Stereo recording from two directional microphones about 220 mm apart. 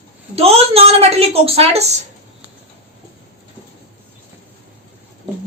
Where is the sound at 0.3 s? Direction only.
25° right (ahead or behind).